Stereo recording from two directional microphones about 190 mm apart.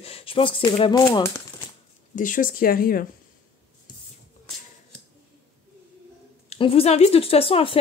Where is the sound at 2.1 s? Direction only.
45° left (ahead or behind).